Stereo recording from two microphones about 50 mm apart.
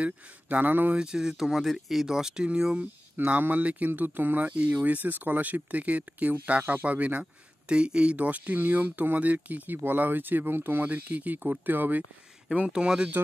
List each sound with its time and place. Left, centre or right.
0.0 s speech: right
0.9 s speech: centre
3.3 s speech: right; by 8.2 s centre
8.2 s speech: right
12.5 s speech: centre